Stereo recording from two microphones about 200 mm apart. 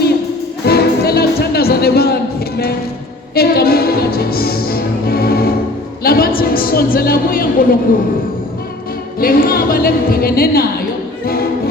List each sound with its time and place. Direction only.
0.6 s music: 50° left (ahead or behind)
3.3 s music: 50° left (ahead or behind)
6.0 s a woman's voice: 50° left (ahead or behind)
9.2 s a woman's voice: 45° left (ahead or behind)